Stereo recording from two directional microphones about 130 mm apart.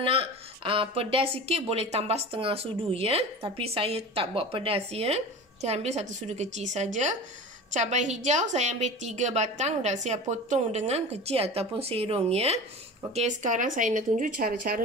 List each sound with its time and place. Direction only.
0.0 s a woman's voice: 45° right (ahead or behind)
13.1 s speech: 65° right (ahead or behind)